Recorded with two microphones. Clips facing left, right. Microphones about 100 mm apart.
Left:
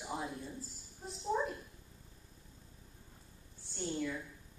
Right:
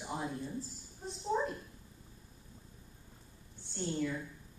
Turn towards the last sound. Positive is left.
turn(degrees=0)  # may be behind; listen again after turning